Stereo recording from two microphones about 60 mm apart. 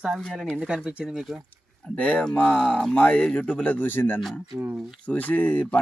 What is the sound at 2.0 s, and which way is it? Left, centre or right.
Speech, left.